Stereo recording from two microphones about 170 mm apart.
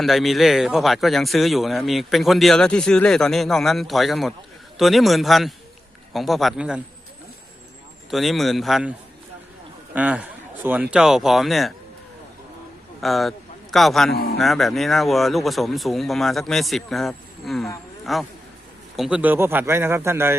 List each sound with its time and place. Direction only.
0.0 s speech: centre (ahead or behind)
8.1 s a man's voice: centre (ahead or behind)
13.0 s a man's voice: centre (ahead or behind)